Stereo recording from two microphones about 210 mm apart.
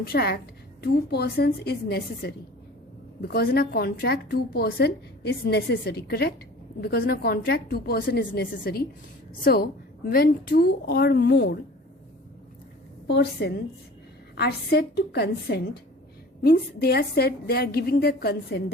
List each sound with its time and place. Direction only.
0.0 s a woman's voice: 50° left (ahead or behind)
13.1 s a woman's voice: 55° left (ahead or behind)